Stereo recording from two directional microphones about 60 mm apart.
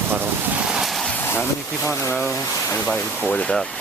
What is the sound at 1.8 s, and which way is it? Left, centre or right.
Speech, left.